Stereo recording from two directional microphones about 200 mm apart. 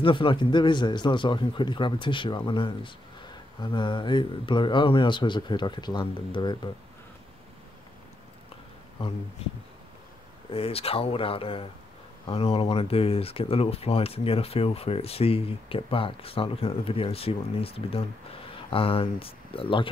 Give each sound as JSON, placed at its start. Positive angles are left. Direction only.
{"t": 0.0, "sound": "speech", "side_deg": 25}
{"t": 10.5, "sound": "speech", "side_deg": 30}